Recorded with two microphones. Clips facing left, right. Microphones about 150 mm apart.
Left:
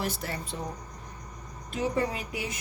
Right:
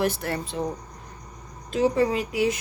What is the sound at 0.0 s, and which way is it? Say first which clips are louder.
Speech: right 8 dB; 65° right (ahead or behind).